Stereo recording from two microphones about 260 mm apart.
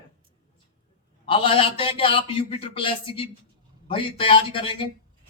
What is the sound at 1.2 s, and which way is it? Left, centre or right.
A man's voice, centre.